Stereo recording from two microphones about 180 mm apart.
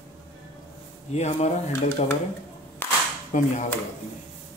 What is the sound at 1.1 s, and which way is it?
Speech, 35° left (ahead or behind).